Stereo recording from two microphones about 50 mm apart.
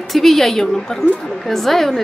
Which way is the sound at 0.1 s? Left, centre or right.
Centre.